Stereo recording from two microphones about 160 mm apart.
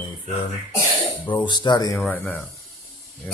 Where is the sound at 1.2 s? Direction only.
30° left (ahead or behind).